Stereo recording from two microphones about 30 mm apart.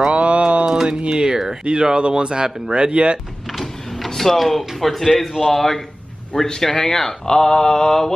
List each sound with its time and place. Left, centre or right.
0.1 s a sound: right
0.8 s speech: right
1.6 s speech: right
3.5 s printer: centre
4.1 s speech: centre